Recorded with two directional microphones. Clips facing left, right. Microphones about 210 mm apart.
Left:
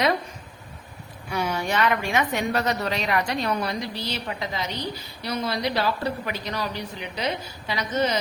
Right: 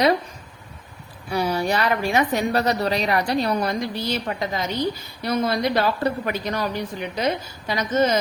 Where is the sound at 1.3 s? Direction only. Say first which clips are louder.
Right 4 dB; 35° right (ahead or behind).